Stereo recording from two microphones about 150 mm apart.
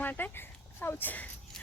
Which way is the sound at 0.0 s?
15° left (ahead or behind).